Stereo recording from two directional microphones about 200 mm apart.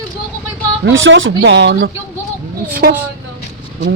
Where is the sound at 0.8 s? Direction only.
65° right (ahead or behind).